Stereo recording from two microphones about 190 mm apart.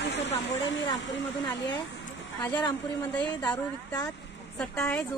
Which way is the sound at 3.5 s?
20° left (ahead or behind).